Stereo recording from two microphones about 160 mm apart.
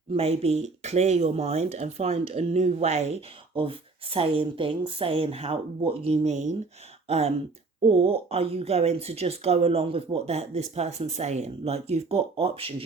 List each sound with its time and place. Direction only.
0.1 s speech: 40° right (ahead or behind)